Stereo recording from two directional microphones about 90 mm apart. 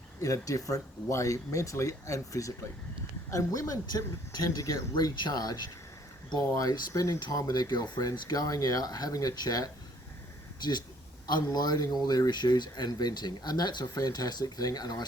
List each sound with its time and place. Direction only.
0.2 s speech: 35° left (ahead or behind)
6.6 s speech: 40° left (ahead or behind)